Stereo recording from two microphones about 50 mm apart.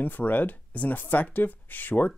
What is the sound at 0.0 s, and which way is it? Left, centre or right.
Speech, left.